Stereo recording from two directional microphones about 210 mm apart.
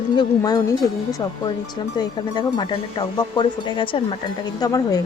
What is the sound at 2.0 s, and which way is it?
A woman's voice, 20° left (ahead or behind).